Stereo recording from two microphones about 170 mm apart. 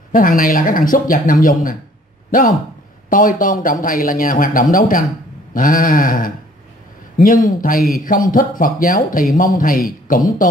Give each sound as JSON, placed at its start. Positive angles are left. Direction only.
{"t": 0.1, "sound": "speech", "side_deg": 55}
{"t": 3.1, "sound": "speech", "side_deg": 55}